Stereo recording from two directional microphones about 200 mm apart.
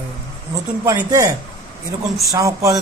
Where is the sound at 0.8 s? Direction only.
15° right (ahead or behind).